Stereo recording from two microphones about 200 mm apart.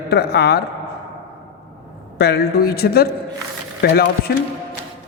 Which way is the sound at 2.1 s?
55° left (ahead or behind).